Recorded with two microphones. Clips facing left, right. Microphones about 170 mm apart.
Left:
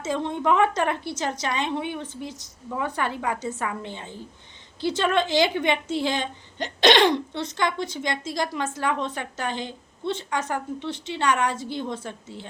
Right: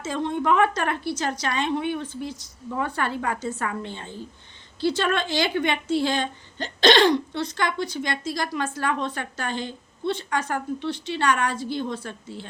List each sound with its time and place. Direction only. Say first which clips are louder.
0.0 s a woman's voice: even; 20° left (ahead or behind)